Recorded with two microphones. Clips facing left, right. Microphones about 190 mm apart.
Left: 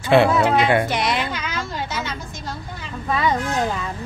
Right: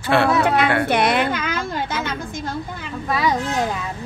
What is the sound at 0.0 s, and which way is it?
Speech, 20° left (ahead or behind).